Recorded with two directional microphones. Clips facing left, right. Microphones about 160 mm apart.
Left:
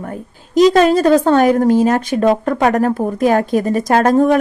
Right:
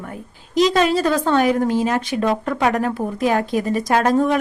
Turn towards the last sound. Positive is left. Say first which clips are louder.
# left 5 dB
turn(degrees=45)  # may be behind; listen again after turning